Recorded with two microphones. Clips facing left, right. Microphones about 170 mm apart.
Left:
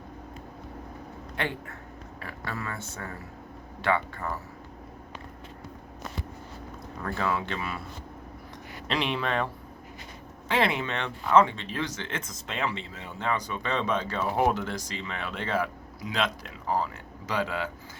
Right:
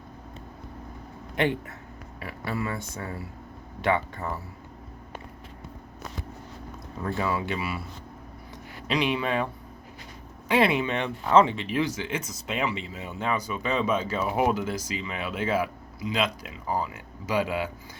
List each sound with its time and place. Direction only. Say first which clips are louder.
1.4 s a man's voice: right 7 dB; 20° right (ahead or behind)
7.3 s speech: right 1 dB; 5° right (ahead or behind)
8.9 s speech: right 3 dB; centre (ahead or behind)
10.5 s speech: right 4 dB; 15° right (ahead or behind)